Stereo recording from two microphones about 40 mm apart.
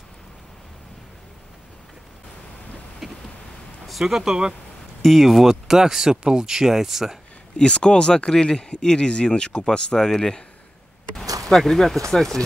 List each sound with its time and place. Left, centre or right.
3.0 s a sound: centre
4.0 s speech: centre
5.0 s speech: centre
7.5 s speech: left; by 12.4 s centre